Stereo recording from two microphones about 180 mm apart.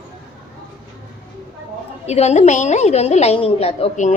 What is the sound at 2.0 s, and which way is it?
A woman's voice, 35° left (ahead or behind).